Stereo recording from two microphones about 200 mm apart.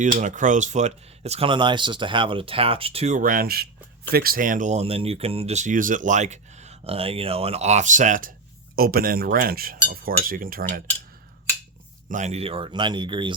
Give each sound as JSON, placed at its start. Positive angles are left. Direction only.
{"t": 0.0, "sound": "speech", "side_deg": -40}
{"t": 12.0, "sound": "speech", "side_deg": -35}